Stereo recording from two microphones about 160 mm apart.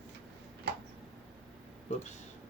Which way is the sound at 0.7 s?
90° right.